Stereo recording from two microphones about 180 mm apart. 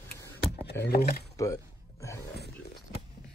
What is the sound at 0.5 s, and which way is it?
Speech, 65° left (ahead or behind).